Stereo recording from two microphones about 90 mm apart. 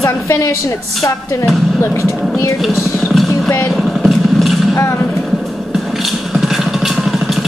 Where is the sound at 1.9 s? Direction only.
35° left (ahead or behind).